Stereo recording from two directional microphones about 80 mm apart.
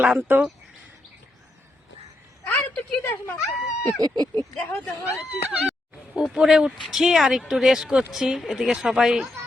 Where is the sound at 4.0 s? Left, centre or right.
Right.